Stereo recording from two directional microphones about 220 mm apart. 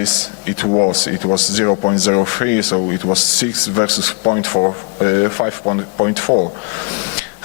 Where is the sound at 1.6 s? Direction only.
25° left (ahead or behind).